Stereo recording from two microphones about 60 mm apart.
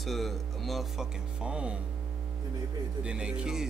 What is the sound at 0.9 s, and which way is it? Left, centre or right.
Speech, centre.